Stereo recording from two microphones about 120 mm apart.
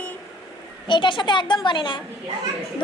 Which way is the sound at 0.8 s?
40° left (ahead or behind).